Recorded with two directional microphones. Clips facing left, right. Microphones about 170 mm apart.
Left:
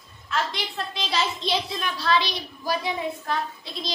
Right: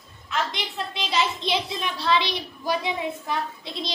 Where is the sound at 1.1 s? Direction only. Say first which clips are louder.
Right 1 dB; 20° right (ahead or behind).